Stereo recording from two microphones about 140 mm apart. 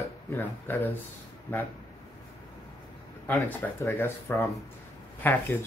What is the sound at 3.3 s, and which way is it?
Speech, 10° left (ahead or behind).